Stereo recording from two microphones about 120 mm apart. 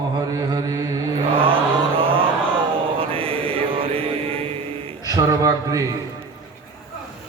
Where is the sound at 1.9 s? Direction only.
50° right (ahead or behind).